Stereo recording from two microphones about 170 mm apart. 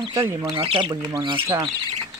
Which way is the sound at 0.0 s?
30° right (ahead or behind).